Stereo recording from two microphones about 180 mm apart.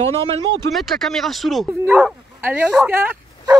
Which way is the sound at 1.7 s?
10° right (ahead or behind).